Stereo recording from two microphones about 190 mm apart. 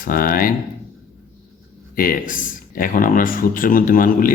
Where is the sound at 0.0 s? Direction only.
50° left (ahead or behind).